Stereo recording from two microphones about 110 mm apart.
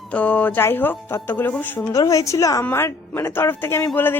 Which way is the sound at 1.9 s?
30° left (ahead or behind).